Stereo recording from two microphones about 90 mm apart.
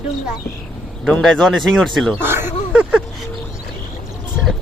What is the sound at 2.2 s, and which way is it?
Speech, 25° right (ahead or behind).